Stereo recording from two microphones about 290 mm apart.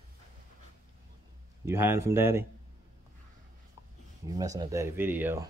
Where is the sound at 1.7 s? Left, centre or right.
Centre.